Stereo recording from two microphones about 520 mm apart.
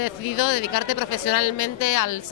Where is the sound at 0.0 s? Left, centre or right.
Left.